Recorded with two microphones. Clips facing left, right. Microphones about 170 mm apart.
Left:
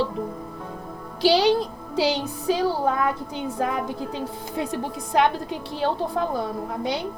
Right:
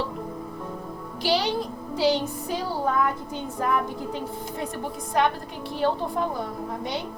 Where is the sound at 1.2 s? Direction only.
90° left.